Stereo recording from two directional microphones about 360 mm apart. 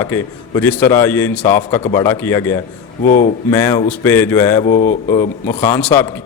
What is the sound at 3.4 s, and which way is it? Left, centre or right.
Speech, centre.